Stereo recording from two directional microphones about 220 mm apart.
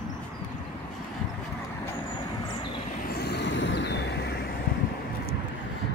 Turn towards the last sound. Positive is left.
turn(degrees=50)  # may be behind; listen again after turning